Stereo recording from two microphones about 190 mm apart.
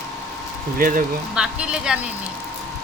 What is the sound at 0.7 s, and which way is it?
Speech, 45° right (ahead or behind).